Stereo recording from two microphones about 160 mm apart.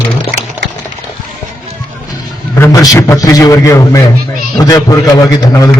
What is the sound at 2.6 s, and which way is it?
A man's voice, 20° left (ahead or behind).